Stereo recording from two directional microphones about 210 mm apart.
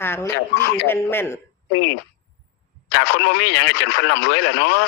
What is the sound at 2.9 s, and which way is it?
Speech, 60° left (ahead or behind).